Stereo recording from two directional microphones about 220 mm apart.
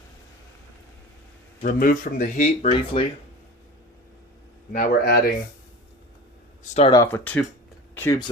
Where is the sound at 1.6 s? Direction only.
40° left (ahead or behind).